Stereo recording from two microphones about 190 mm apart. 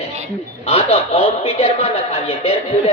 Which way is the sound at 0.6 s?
35° left (ahead or behind).